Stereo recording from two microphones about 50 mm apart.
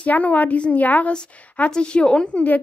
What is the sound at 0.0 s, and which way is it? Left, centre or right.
A woman's voice, left.